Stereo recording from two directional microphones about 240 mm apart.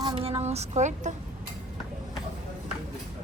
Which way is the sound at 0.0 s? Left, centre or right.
Right.